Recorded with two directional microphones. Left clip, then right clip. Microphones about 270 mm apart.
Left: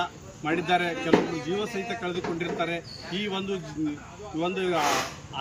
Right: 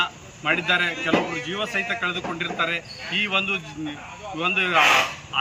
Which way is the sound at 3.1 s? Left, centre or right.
Centre.